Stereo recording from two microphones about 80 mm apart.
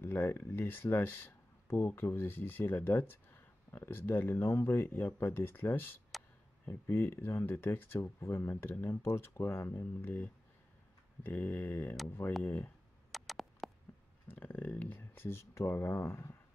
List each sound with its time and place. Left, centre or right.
0.0 s speech: left
13.1 s a sound: centre
14.2 s speech: left